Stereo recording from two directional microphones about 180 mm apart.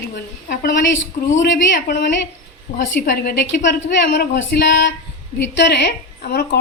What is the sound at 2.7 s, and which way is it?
A woman's voice, 50° left (ahead or behind).